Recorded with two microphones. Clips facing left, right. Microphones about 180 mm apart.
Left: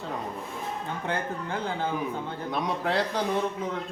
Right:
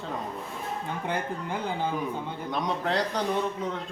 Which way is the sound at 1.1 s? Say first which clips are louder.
Even; 15° right (ahead or behind).